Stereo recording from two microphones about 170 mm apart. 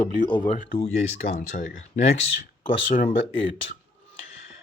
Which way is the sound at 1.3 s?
55° left (ahead or behind).